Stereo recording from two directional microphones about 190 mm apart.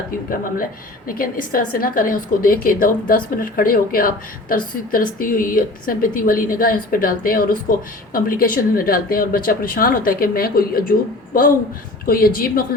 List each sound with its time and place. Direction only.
1.0 s a woman's voice: 50° left (ahead or behind)
12.0 s a woman's voice: 50° left (ahead or behind)